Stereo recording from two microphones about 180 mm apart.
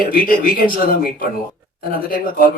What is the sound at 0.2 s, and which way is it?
Speech, 50° left (ahead or behind).